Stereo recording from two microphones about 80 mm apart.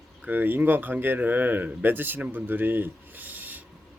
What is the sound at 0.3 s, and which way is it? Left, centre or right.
Speech, right.